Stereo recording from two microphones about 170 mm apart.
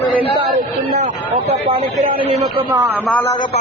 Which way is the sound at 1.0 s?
35° right (ahead or behind).